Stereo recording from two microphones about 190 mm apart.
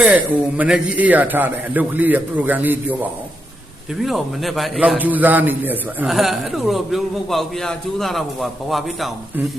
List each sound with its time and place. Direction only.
0.0 s a man's voice: 5° right (ahead or behind)